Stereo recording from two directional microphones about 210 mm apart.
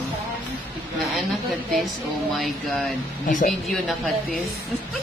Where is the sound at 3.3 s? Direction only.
40° left (ahead or behind).